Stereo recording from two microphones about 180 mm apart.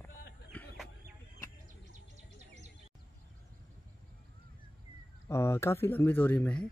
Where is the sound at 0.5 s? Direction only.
Centre (ahead or behind).